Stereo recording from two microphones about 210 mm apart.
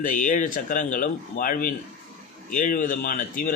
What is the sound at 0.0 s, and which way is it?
A man's voice, 40° left (ahead or behind).